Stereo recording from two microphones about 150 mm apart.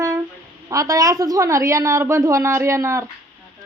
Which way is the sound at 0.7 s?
20° right (ahead or behind).